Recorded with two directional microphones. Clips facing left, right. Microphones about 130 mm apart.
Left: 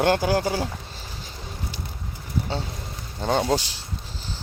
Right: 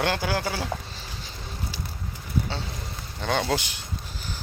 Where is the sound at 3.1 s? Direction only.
35° left (ahead or behind).